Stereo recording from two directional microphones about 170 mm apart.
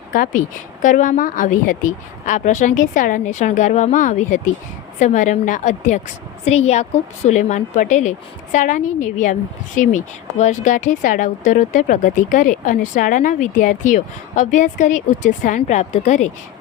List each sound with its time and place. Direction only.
0.1 s a woman's voice: 50° left (ahead or behind)